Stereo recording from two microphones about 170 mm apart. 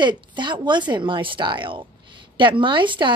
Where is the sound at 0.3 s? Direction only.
25° right (ahead or behind).